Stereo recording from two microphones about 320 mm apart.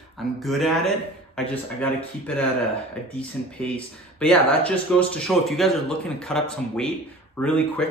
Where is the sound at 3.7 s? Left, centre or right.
Centre.